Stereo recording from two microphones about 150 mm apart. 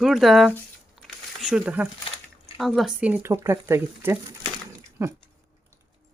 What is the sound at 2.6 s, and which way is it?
Speech, centre (ahead or behind).